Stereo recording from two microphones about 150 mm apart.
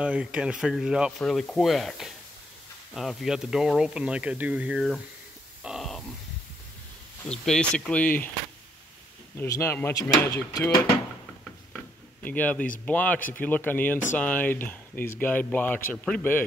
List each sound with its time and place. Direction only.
0.0 s speech: 5° right (ahead or behind)
5.6 s grunt: centre (ahead or behind)
7.2 s speech: 5° left (ahead or behind)
9.4 s speech: 15° left (ahead or behind)
11.7 s a sound: 10° left (ahead or behind)
12.8 s speech: 10° left (ahead or behind)